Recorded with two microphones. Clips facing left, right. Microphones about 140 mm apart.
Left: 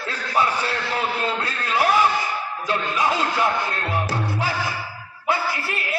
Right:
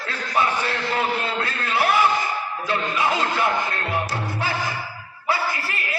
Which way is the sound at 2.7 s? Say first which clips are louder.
Left 1 dB; 15° left (ahead or behind).